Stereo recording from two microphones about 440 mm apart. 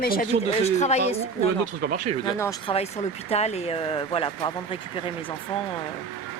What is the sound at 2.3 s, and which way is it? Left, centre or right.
Speech, centre.